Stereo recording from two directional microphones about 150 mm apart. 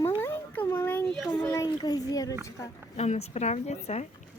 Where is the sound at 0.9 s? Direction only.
10° left (ahead or behind).